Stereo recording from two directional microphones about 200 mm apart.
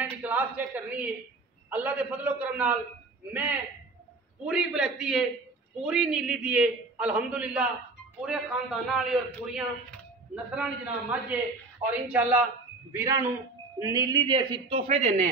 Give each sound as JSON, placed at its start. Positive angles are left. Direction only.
{"t": 0.0, "sound": "a man's voice", "side_deg": -10}
{"t": 4.5, "sound": "a man's voice", "side_deg": -5}